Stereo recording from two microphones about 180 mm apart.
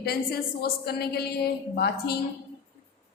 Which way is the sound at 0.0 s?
60° left (ahead or behind).